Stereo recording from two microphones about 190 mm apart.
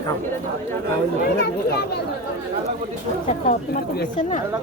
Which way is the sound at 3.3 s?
45° left (ahead or behind).